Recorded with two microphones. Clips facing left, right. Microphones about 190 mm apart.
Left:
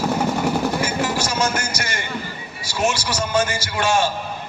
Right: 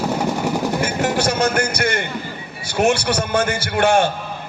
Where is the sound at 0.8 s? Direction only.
60° right (ahead or behind).